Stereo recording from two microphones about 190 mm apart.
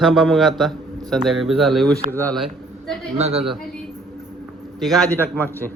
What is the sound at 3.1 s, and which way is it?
Speech, 35° right (ahead or behind).